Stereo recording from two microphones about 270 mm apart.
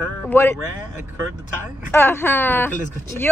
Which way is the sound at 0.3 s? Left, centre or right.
Centre.